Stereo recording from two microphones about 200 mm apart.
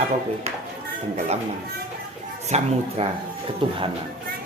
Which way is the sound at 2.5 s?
30° right (ahead or behind).